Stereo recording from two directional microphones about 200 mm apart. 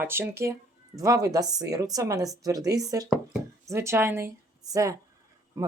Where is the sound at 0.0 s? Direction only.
10° right (ahead or behind).